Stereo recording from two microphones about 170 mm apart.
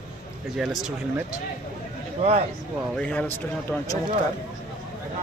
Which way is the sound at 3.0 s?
5° left (ahead or behind).